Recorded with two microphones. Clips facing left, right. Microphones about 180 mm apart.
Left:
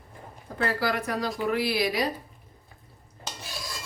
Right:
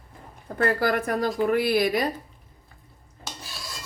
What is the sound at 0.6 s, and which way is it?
Speech, 50° right (ahead or behind).